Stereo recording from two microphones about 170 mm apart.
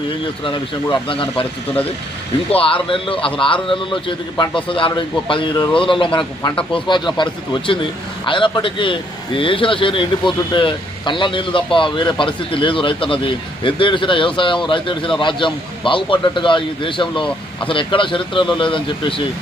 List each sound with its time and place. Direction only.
0.4 s speech: 30° left (ahead or behind)
2.6 s a man's voice: 30° left (ahead or behind)